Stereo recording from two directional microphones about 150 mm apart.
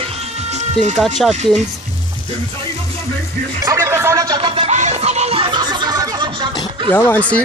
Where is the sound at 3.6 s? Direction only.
20° right (ahead or behind); by 4.7 s 35° right (ahead or behind).